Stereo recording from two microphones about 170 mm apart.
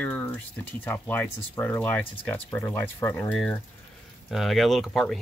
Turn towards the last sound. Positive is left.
turn(degrees=0)  # may be behind; listen again after turning